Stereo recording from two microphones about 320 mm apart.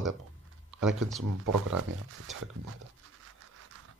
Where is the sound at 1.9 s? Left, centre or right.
Right.